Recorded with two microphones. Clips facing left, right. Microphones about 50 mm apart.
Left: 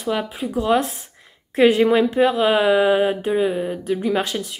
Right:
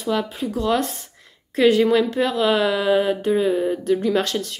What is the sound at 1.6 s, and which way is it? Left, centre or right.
A woman's voice, left.